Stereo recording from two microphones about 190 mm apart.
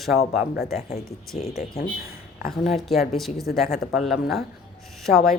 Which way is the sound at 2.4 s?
45° left (ahead or behind).